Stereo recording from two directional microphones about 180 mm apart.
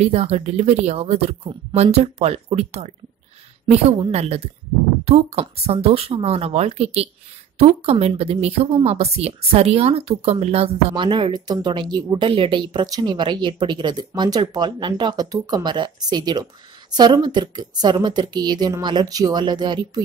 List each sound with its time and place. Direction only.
0.0 s speech: 35° right (ahead or behind)
4.0 s speech: 35° right (ahead or behind)